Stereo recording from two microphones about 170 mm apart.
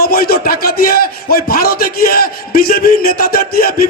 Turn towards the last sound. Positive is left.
turn(degrees=60)  # may be behind; listen again after turning